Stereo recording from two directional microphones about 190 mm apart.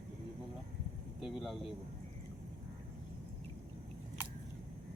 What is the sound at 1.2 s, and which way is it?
Speech, centre (ahead or behind).